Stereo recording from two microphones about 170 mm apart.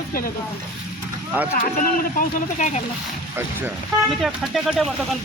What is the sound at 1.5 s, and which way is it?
A man's voice, 55° left (ahead or behind).